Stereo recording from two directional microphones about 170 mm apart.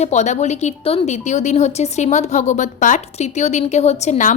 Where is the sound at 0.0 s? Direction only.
40° left (ahead or behind).